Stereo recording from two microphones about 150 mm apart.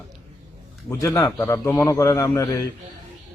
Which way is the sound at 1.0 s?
20° left (ahead or behind).